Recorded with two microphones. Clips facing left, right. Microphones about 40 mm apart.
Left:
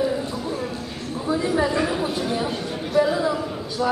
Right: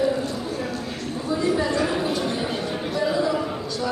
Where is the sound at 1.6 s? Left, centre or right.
Centre.